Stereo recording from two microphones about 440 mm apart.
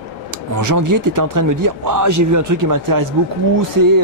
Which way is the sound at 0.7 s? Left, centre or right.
Right.